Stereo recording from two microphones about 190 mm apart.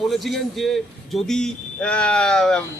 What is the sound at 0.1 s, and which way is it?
Speech, centre (ahead or behind).